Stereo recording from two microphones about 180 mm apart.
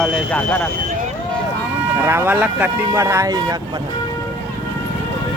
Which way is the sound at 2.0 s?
15° right (ahead or behind).